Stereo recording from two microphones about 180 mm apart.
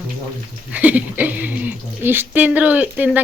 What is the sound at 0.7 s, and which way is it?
Speech, 10° right (ahead or behind).